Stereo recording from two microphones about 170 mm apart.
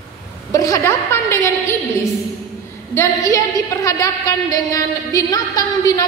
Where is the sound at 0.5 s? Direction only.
20° left (ahead or behind).